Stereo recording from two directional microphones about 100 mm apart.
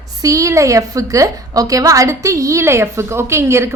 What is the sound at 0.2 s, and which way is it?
A woman's voice, 35° right (ahead or behind).